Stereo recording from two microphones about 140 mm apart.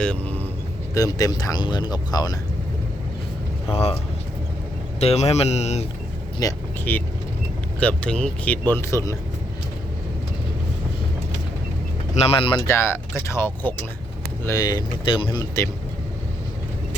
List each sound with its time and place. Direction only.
0.0 s speech: 10° left (ahead or behind)
0.9 s speech: 25° left (ahead or behind)
3.7 s speech: 45° left (ahead or behind)
4.9 s speech: 50° left (ahead or behind)
6.4 s speech: 25° left (ahead or behind)
6.9 s speech: 10° left (ahead or behind)
12.1 s speech: 45° left (ahead or behind)
12.6 s speech: 15° left (ahead or behind)
14.4 s speech: 25° left (ahead or behind)